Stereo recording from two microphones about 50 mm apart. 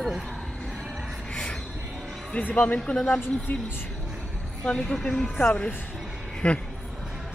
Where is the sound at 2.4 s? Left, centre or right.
Left.